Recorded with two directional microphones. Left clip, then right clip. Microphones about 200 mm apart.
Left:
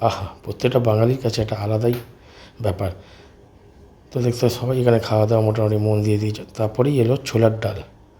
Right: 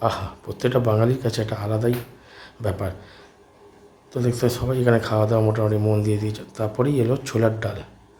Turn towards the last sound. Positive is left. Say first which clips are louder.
# left 4 dB
turn(degrees=15)  # may be behind; listen again after turning